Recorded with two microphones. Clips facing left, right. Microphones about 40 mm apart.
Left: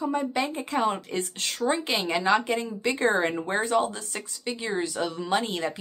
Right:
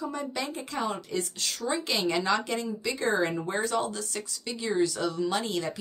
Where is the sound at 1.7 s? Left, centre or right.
Left.